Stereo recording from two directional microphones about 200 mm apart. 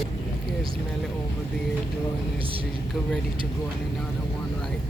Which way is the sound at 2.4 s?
25° right (ahead or behind).